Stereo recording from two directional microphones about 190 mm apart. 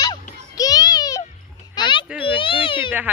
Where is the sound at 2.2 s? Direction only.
25° left (ahead or behind).